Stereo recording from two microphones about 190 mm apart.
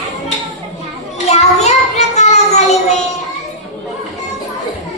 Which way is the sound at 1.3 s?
35° left (ahead or behind).